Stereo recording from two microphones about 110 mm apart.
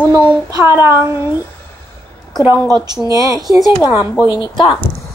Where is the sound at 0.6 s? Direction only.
20° right (ahead or behind).